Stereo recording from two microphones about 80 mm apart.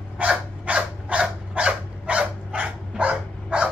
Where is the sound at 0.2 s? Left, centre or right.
Centre.